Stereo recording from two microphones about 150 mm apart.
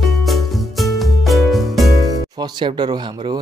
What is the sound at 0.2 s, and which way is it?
Music, centre (ahead or behind).